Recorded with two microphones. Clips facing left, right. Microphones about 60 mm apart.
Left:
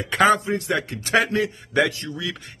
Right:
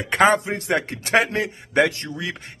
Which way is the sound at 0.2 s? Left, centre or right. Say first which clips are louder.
Even; right.